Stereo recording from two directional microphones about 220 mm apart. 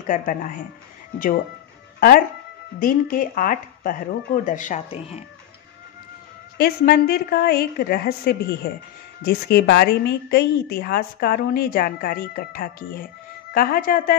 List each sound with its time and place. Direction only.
0.0 s speech: 40° left (ahead or behind)
2.0 s speech: 40° left (ahead or behind)
6.6 s a woman's voice: 45° left (ahead or behind)